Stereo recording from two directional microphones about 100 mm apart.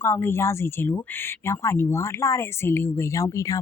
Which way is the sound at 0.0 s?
25° left (ahead or behind).